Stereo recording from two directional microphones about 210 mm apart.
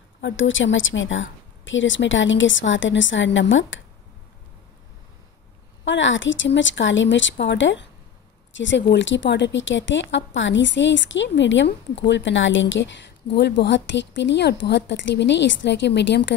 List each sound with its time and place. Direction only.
0.2 s speech: 65° left (ahead or behind)
5.9 s speech: 60° left (ahead or behind)